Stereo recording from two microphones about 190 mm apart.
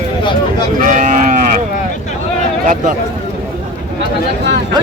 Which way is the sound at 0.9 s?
40° right (ahead or behind).